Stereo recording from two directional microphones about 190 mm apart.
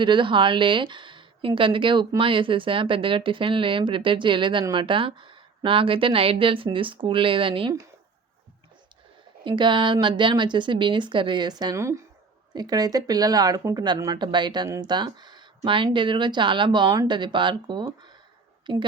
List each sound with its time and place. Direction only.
0.0 s a woman's voice: 25° right (ahead or behind)
9.4 s a woman's voice: 25° right (ahead or behind)